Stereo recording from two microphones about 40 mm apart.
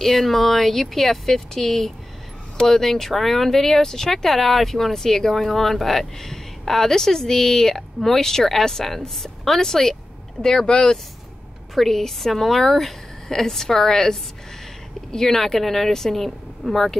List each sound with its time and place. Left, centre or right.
0.0 s speech: centre
11.7 s speech: centre